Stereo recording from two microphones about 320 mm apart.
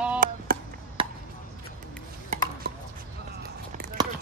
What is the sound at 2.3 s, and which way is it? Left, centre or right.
Chopping, right.